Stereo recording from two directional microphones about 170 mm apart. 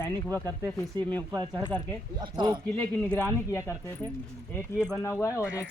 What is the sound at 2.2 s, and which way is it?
Speech, 25° right (ahead or behind).